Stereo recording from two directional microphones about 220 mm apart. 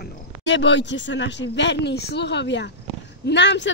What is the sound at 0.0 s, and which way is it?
A woman's voice, 55° left (ahead or behind).